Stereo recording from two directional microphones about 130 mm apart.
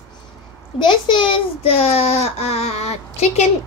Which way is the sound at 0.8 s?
40° left (ahead or behind).